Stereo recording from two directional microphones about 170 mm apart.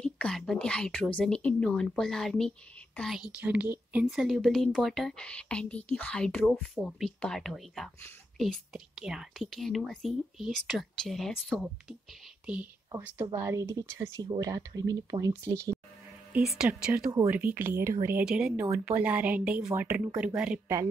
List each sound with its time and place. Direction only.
0.0 s a woman's voice: 5° left (ahead or behind)
13.0 s a woman's voice: 15° right (ahead or behind)